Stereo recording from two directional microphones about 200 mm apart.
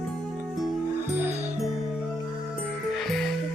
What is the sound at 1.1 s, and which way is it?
Music, 10° right (ahead or behind).